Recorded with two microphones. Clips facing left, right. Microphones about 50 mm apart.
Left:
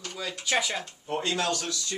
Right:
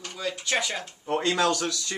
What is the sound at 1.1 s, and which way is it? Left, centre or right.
Speech, right.